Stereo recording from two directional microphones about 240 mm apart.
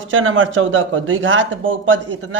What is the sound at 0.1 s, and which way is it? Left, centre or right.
A man's voice, right.